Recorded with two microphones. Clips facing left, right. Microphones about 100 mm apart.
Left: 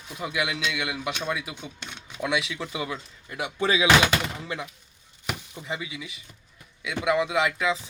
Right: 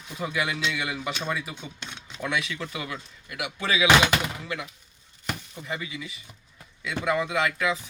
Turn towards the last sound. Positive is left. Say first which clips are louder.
# left 1 dB
turn(degrees=20)  # may be behind; listen again after turning